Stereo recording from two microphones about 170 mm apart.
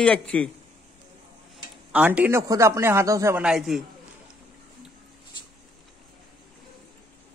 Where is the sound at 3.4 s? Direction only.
Centre (ahead or behind).